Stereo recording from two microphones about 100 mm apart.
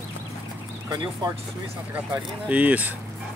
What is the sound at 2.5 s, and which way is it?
Speech, 15° right (ahead or behind).